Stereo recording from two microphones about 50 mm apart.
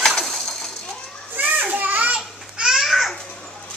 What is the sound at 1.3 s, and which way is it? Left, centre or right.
Children playing, right.